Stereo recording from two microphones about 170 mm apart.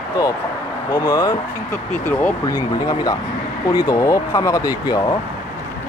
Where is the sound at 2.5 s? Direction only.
20° left (ahead or behind).